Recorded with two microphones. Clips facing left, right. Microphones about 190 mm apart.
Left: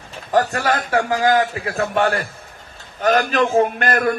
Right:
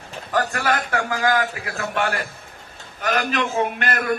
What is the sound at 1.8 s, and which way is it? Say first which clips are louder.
Speech: left 5 dB; 35° left (ahead or behind).